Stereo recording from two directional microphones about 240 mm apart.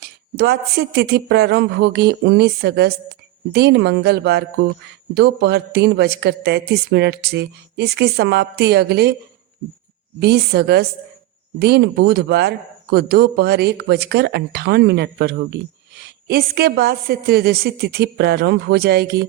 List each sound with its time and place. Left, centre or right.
0.0 s a woman's voice: right
10.2 s a woman's voice: right